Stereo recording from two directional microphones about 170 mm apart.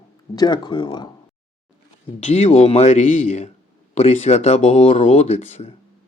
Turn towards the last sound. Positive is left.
turn(degrees=40)  # may be behind; listen again after turning